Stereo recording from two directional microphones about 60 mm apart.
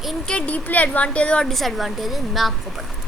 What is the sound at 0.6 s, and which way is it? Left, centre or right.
Speech, left.